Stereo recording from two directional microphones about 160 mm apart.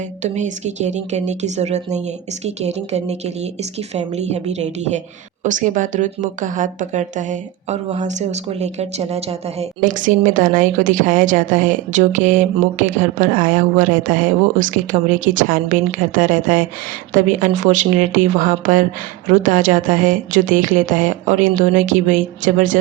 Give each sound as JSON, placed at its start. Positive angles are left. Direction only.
{"t": 0.2, "sound": "a woman's voice", "side_deg": -50}